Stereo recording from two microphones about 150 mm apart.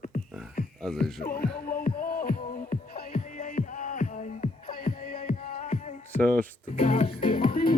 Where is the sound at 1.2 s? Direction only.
75° left (ahead or behind); by 6.0 s 50° left (ahead or behind).